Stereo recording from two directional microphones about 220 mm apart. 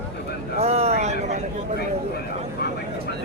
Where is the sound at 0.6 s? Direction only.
30° right (ahead or behind).